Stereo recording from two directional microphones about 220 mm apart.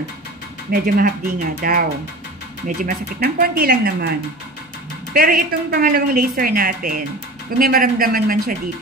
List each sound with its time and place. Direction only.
0.7 s a woman's voice: 40° right (ahead or behind)
5.1 s a woman's voice: 40° right (ahead or behind)